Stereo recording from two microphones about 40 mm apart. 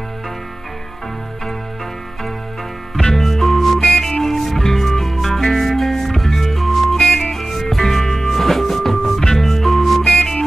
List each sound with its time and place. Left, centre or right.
3.0 s music: centre
7.1 s music: left
7.3 s music: centre